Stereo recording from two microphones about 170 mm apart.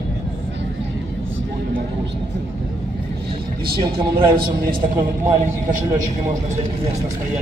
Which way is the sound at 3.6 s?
65° right (ahead or behind).